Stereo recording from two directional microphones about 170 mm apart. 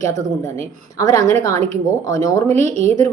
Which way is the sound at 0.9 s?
20° left (ahead or behind).